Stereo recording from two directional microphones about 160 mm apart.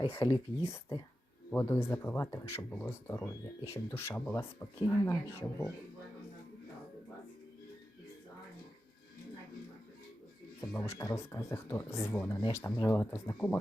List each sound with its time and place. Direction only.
0.1 s speech: 15° left (ahead or behind)
10.6 s speech: 15° left (ahead or behind)